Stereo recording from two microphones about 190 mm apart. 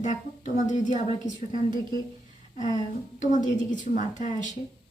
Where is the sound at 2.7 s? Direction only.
40° left (ahead or behind).